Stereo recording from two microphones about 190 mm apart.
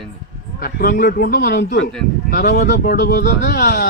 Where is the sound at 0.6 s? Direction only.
50° left (ahead or behind).